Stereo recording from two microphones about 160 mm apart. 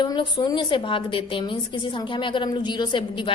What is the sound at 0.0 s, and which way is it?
A woman's voice, 25° left (ahead or behind).